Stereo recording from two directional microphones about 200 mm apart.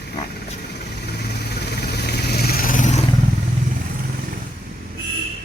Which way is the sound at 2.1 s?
50° left (ahead or behind).